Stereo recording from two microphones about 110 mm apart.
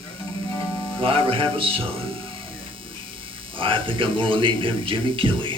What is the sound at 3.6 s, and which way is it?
Speech, 50° right (ahead or behind).